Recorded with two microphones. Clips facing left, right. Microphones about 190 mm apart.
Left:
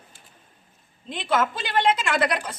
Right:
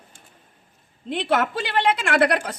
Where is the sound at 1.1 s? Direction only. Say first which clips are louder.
Right 2 dB; 65° right (ahead or behind).